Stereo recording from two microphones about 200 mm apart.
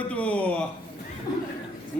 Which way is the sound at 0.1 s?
5° left (ahead or behind).